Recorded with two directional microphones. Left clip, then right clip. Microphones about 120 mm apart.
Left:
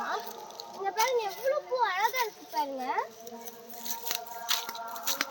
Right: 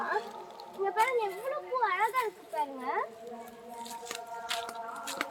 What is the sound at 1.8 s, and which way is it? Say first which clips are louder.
Speech: right 2 dB; 25° right (ahead or behind).